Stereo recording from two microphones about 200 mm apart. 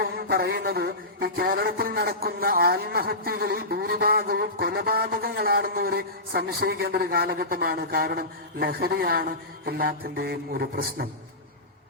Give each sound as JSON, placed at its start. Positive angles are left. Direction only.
{"t": 0.0, "sound": "a man's voice", "side_deg": -50}